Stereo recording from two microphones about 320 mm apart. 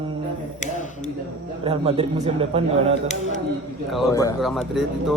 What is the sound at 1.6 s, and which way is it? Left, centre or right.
A man's voice, centre.